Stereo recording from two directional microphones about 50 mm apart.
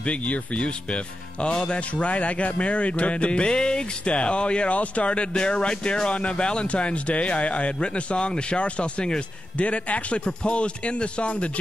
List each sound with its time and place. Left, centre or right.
0.0 s speech: left